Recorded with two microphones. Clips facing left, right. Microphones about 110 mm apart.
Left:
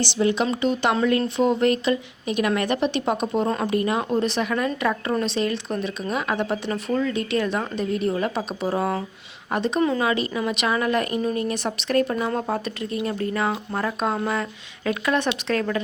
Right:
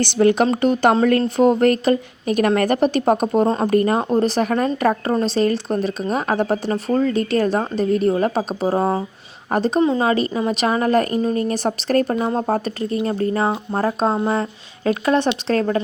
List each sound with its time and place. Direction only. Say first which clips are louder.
0.0 s speech: right 6 dB; 55° right (ahead or behind)
3.4 s speech: right 5 dB; 30° right (ahead or behind)
3.7 s speech: right 5 dB; 45° right (ahead or behind)